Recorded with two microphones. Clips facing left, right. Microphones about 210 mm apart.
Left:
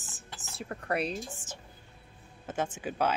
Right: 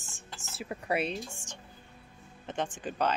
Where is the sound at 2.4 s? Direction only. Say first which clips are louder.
Left 1 dB; 5° left (ahead or behind).